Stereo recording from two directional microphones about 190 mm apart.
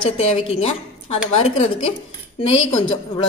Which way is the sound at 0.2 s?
30° left (ahead or behind).